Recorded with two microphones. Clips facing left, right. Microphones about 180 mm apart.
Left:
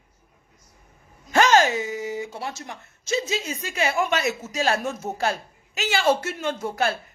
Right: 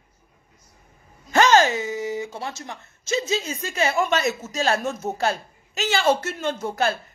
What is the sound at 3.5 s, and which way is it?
Speech, 10° left (ahead or behind).